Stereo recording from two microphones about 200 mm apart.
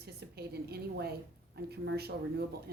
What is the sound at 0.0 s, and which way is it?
A woman's voice, 50° right (ahead or behind).